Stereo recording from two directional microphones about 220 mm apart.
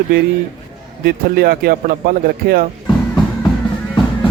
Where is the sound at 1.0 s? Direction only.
45° right (ahead or behind).